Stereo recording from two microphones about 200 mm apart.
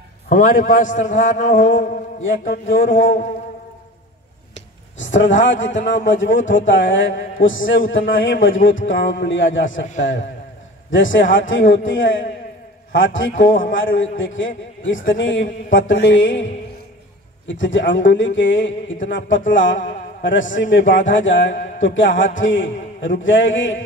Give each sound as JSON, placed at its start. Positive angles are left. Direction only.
{"t": 0.3, "sound": "a man's voice", "side_deg": 45}
{"t": 2.2, "sound": "a man's voice", "side_deg": 70}
{"t": 4.9, "sound": "a man's voice", "side_deg": 70}
{"t": 10.9, "sound": "a man's voice", "side_deg": 70}